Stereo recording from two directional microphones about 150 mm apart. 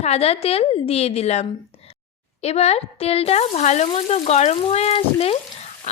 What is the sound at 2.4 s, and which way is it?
Frying, 45° left (ahead or behind).